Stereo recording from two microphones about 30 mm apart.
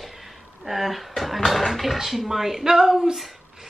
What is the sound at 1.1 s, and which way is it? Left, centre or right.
Speech, centre.